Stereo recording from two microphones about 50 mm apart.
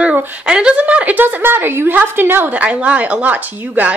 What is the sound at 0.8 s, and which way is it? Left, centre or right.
A woman's voice, right.